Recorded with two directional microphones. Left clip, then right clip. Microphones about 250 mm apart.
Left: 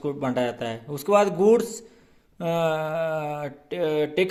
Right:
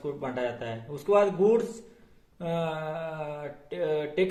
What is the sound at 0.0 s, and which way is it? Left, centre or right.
Speech, left.